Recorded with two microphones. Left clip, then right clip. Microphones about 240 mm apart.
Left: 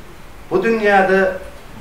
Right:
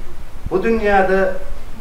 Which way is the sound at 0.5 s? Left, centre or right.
Centre.